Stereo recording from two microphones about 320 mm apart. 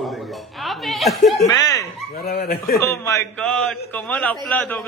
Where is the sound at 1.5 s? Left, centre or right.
Centre.